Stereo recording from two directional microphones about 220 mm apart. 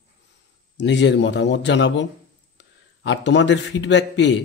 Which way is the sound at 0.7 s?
55° left (ahead or behind).